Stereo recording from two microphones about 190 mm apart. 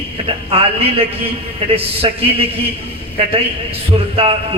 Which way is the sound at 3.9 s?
30° right (ahead or behind).